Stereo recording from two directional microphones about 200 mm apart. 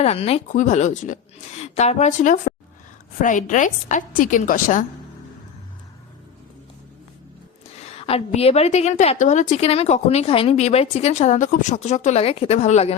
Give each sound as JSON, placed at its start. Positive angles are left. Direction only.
{"t": 0.0, "sound": "a woman's voice", "side_deg": 30}
{"t": 7.8, "sound": "a woman's voice", "side_deg": 30}